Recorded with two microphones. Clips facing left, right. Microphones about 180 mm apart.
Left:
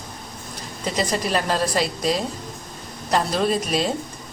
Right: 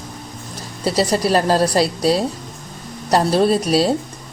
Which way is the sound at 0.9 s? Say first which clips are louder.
Right 6 dB; 35° right (ahead or behind).